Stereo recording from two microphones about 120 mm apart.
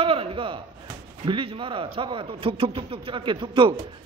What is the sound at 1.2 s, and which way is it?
A man's voice, 45° right (ahead or behind).